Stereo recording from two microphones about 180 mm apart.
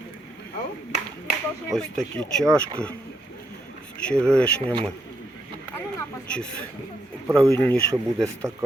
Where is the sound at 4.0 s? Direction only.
5° left (ahead or behind).